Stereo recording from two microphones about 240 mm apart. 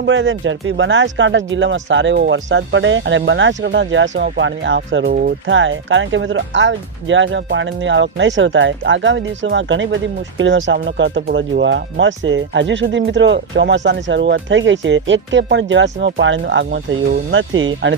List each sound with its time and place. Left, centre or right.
0.0 s speech: right